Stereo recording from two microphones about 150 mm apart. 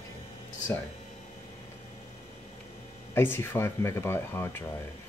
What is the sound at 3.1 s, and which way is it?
Speech, 15° left (ahead or behind).